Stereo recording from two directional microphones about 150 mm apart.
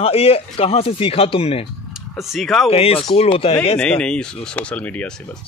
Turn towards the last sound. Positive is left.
turn(degrees=10)  # may be behind; listen again after turning